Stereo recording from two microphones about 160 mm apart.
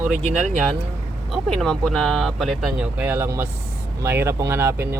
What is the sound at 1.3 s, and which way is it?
Speech, centre (ahead or behind).